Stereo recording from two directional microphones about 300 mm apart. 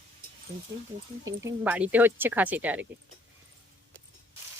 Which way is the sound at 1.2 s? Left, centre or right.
Centre.